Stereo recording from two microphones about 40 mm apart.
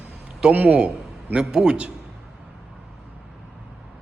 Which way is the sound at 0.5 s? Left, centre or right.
Right.